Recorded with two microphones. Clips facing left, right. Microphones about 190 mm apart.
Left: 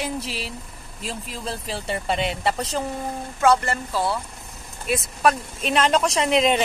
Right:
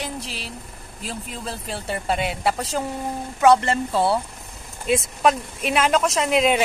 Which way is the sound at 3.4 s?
25° right (ahead or behind).